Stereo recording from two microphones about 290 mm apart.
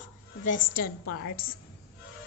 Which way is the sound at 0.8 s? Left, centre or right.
Left.